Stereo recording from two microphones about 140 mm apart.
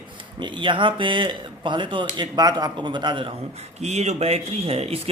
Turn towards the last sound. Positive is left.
turn(degrees=-45)  # may be behind; listen again after turning